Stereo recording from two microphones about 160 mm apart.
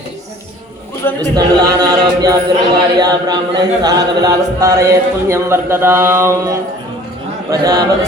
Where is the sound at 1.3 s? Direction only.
25° right (ahead or behind).